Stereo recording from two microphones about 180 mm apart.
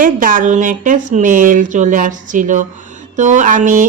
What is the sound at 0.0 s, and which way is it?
Speech, 50° right (ahead or behind).